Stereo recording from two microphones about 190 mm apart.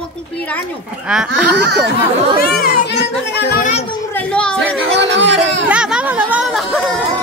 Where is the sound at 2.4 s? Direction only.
50° left (ahead or behind).